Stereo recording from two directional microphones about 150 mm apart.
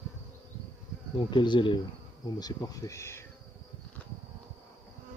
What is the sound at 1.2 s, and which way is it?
Speech, 30° left (ahead or behind).